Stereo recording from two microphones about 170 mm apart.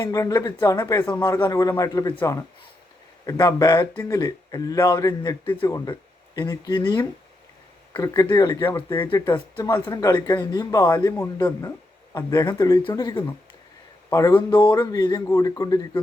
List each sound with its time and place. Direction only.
0.0 s speech: 20° left (ahead or behind)